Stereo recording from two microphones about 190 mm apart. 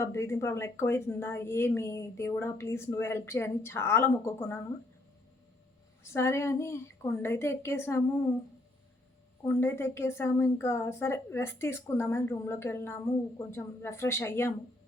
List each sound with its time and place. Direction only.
0.0 s a woman's voice: 15° left (ahead or behind)
6.0 s a woman's voice: 15° left (ahead or behind)
9.4 s a woman's voice: 10° left (ahead or behind)